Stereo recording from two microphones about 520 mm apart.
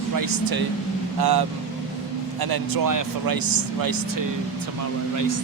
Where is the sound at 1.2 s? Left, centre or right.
Right.